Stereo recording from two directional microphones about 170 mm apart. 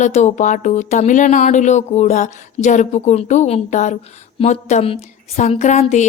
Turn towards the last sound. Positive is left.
turn(degrees=40)  # may be behind; listen again after turning